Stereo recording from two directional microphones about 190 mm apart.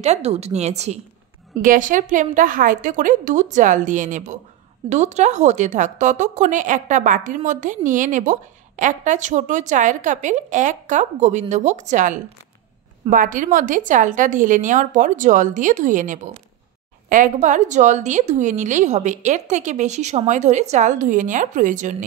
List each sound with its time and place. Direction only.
0.0 s a woman's voice: 35° right (ahead or behind)